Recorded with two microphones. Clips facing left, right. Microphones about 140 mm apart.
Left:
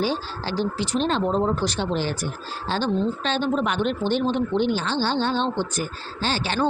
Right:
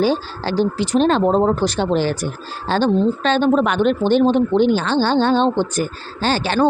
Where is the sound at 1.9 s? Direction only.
55° right (ahead or behind).